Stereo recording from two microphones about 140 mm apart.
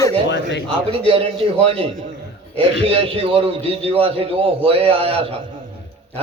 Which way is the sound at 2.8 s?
40° right (ahead or behind).